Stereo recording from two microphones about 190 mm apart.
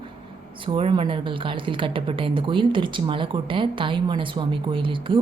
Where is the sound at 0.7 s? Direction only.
25° right (ahead or behind).